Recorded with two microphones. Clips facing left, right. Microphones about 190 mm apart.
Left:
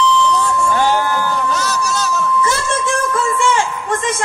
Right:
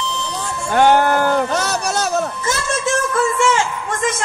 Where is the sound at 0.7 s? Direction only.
55° right (ahead or behind).